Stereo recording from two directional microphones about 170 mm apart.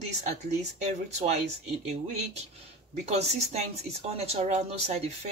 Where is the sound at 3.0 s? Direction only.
40° right (ahead or behind).